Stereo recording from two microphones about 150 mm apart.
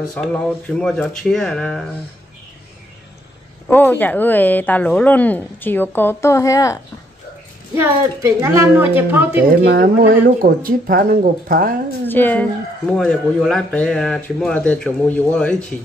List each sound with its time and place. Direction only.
0.2 s speech: 10° left (ahead or behind)
3.6 s speech: 15° left (ahead or behind)
7.7 s a woman's voice: 20° right (ahead or behind)
9.5 s speech: 80° right
12.1 s speech: 10° left (ahead or behind)